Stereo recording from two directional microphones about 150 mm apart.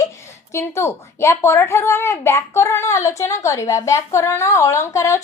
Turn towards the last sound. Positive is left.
turn(degrees=20)  # may be behind; listen again after turning